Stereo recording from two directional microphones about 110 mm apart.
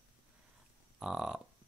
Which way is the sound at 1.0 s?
5° right (ahead or behind).